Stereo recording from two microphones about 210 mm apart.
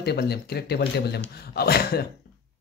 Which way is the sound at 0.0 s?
50° left (ahead or behind).